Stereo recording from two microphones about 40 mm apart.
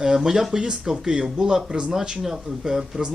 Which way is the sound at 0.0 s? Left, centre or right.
Centre.